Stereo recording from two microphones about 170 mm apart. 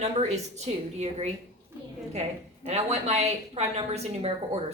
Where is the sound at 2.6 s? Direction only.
40° right (ahead or behind).